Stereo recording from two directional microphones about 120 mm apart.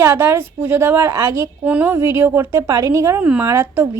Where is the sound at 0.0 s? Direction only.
20° right (ahead or behind).